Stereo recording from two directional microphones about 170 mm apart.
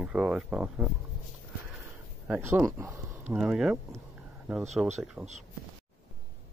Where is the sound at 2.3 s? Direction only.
10° right (ahead or behind).